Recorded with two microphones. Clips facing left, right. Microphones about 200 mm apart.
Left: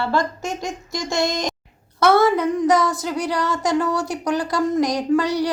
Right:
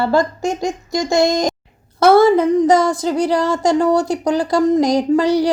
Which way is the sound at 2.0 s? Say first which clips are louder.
Right 5 dB; 30° right (ahead or behind).